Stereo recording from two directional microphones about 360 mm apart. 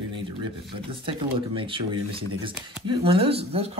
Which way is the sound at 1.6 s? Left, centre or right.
Centre.